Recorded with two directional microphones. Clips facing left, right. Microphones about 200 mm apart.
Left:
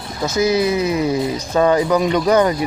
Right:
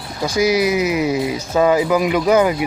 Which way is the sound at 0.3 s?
10° right (ahead or behind).